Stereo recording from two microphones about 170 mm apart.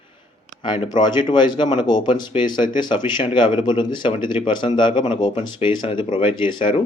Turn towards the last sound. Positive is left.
turn(degrees=30)  # may be behind; listen again after turning